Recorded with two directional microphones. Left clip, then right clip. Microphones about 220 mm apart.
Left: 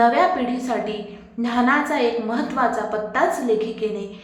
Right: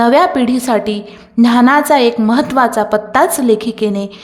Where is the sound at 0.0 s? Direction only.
55° right (ahead or behind).